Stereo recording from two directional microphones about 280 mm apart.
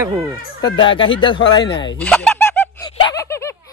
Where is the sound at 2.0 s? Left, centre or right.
Centre.